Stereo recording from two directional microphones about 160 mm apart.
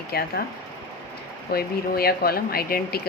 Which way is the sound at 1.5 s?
75° left (ahead or behind).